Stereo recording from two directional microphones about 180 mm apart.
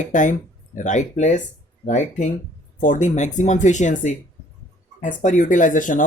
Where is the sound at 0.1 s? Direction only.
45° left (ahead or behind).